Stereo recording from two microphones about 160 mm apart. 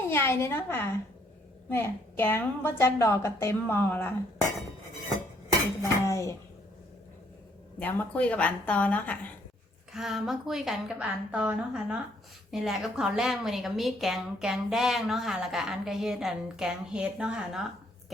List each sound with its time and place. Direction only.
0.1 s a woman's voice: 15° left (ahead or behind)
6.1 s a sound: 20° left (ahead or behind)
7.8 s a woman's voice: 10° left (ahead or behind)
9.9 s a woman's voice: centre (ahead or behind)